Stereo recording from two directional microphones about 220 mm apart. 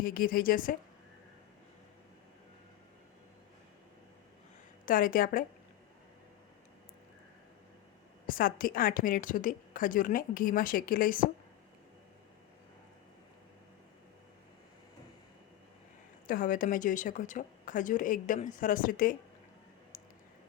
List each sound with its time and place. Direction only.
0.0 s a woman's voice: 40° left (ahead or behind)
4.9 s a woman's voice: 40° left (ahead or behind)
8.3 s a woman's voice: 40° left (ahead or behind)
16.2 s a woman's voice: 40° left (ahead or behind)